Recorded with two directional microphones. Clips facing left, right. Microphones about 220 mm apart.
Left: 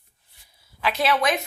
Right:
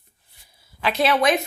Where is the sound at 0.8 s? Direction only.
25° right (ahead or behind).